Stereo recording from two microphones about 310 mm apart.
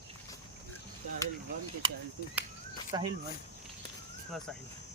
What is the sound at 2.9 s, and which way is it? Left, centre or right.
Speech, centre.